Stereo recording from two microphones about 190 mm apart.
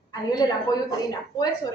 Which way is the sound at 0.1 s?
20° left (ahead or behind).